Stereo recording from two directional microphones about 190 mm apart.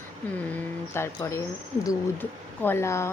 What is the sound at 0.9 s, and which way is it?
Speech, 15° left (ahead or behind).